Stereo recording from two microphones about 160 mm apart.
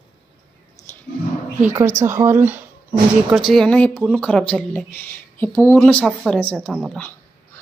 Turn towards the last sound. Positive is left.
turn(degrees=-5)  # may be behind; listen again after turning